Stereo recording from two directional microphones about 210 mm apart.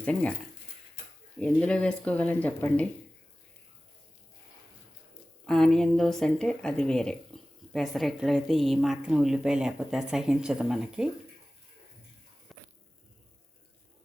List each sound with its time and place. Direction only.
0.0 s a woman's voice: 5° left (ahead or behind)
1.4 s a woman's voice: 5° left (ahead or behind)
5.5 s a woman's voice: 5° left (ahead or behind)
12.5 s a sound: centre (ahead or behind)